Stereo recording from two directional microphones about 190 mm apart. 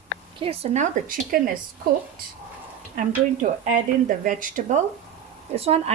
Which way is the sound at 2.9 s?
45° right (ahead or behind).